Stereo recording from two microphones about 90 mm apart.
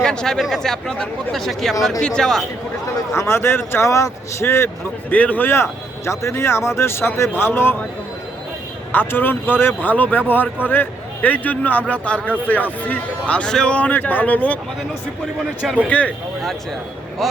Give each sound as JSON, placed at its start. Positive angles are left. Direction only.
{"t": 0.0, "sound": "a man's voice", "side_deg": 10}
{"t": 3.2, "sound": "speech", "side_deg": 30}
{"t": 5.1, "sound": "speech", "side_deg": 15}
{"t": 8.9, "sound": "a man's voice", "side_deg": 20}
{"t": 15.6, "sound": "speech", "side_deg": -10}
{"t": 15.9, "sound": "a man's voice", "side_deg": 15}